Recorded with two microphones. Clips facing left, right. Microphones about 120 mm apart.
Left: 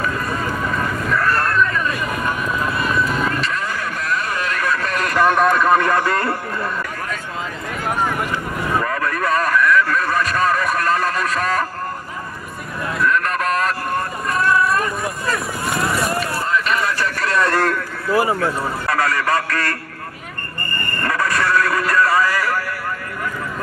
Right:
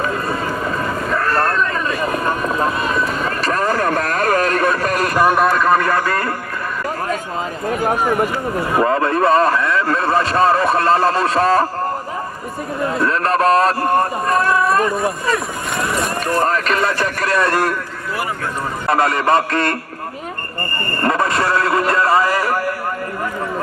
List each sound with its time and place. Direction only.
1.0 s vehicle: 30° right (ahead or behind)
3.3 s a sound: 40° right (ahead or behind)
5.1 s a sound: 10° right (ahead or behind)
8.7 s a sound: 30° right (ahead or behind)
12.9 s speech: 30° right (ahead or behind)
15.2 s speech: centre (ahead or behind)
16.2 s speech: 45° right (ahead or behind)
18.1 s speech: 25° left (ahead or behind)
18.9 s a man's voice: 25° right (ahead or behind)
21.0 s speech: 25° right (ahead or behind)